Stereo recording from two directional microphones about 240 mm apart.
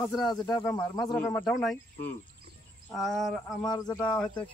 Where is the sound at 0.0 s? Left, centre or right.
Centre.